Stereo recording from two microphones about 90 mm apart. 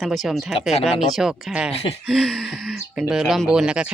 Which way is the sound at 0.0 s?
Centre (ahead or behind).